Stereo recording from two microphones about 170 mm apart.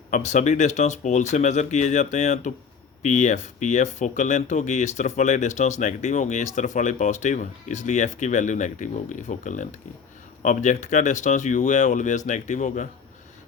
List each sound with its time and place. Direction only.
0.1 s speech: 45° left (ahead or behind)